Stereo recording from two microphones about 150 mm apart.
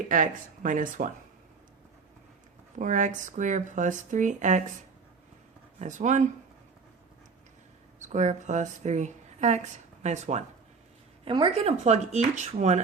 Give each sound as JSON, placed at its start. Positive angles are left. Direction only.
{"t": 0.1, "sound": "speech", "side_deg": -60}
{"t": 2.7, "sound": "speech", "side_deg": -55}
{"t": 5.8, "sound": "speech", "side_deg": -55}
{"t": 7.9, "sound": "speech", "side_deg": -50}
{"t": 11.3, "sound": "speech", "side_deg": -40}